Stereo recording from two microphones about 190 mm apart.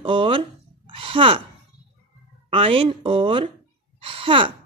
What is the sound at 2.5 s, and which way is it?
A woman's voice, 30° right (ahead or behind).